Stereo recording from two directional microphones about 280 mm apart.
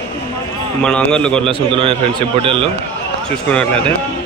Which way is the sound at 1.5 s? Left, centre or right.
Centre.